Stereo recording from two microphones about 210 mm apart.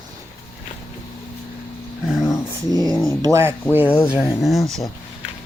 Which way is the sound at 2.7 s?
20° right (ahead or behind).